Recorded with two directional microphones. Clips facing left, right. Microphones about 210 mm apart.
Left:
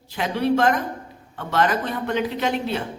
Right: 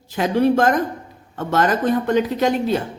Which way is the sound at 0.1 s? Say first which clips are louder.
Right 5 dB; 45° right (ahead or behind).